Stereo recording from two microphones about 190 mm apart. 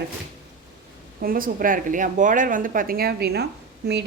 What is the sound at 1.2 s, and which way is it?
A woman's voice, 50° right (ahead or behind).